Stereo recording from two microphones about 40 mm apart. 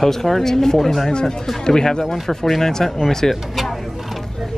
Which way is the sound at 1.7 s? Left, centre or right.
Centre.